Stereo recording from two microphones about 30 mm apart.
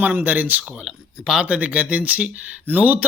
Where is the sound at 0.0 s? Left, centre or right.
Right.